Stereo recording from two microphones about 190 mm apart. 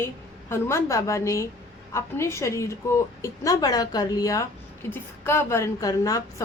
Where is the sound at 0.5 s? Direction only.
15° left (ahead or behind).